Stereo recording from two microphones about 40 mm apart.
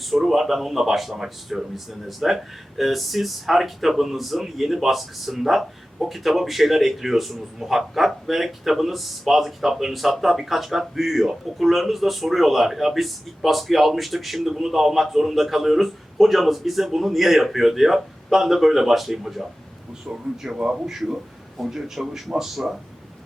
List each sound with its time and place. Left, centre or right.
0.0 s speech: centre
20.1 s speech: right
20.7 s a man's voice: centre